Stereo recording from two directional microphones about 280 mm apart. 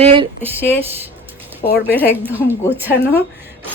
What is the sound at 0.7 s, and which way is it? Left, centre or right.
Speech, centre.